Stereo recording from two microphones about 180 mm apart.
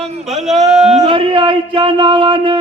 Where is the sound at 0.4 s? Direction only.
Centre (ahead or behind).